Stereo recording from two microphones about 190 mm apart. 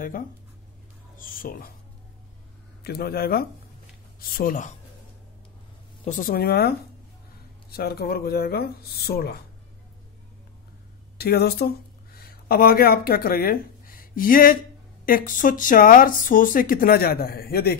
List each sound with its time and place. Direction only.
1.1 s speech: 45° left (ahead or behind)
2.8 s speech: 55° left (ahead or behind)
6.0 s speech: 45° left (ahead or behind)
7.7 s speech: 55° left (ahead or behind)
11.1 s speech: 55° left (ahead or behind)